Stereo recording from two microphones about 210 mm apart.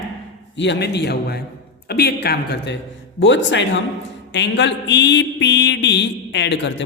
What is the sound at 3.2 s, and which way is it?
Mantra, 60° left (ahead or behind).